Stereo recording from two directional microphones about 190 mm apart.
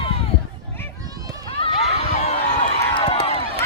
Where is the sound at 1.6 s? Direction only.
30° left (ahead or behind).